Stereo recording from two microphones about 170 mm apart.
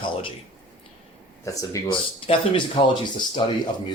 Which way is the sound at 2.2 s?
30° left (ahead or behind).